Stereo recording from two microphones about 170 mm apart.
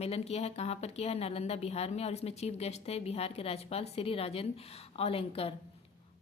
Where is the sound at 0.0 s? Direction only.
35° left (ahead or behind).